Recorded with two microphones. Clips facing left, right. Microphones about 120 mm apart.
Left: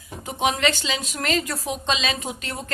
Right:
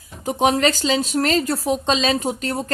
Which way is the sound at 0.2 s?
40° right (ahead or behind).